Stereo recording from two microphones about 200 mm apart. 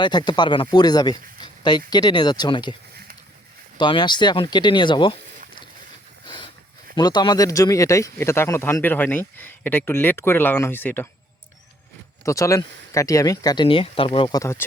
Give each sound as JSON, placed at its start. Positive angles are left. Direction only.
{"t": 0.0, "sound": "speech", "side_deg": 20}
{"t": 3.8, "sound": "speech", "side_deg": 25}
{"t": 6.2, "sound": "a sound", "side_deg": 25}
{"t": 6.9, "sound": "speech", "side_deg": 20}
{"t": 12.2, "sound": "speech", "side_deg": 15}